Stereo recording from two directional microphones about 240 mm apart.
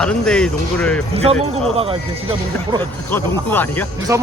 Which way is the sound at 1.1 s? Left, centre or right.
Right.